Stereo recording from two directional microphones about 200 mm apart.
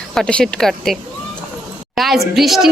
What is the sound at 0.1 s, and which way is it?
Speech, 5° left (ahead or behind).